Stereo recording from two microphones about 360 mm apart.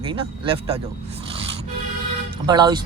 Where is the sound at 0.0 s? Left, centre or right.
Centre.